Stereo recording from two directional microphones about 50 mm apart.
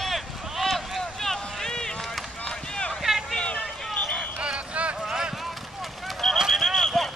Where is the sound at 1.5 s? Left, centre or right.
Centre.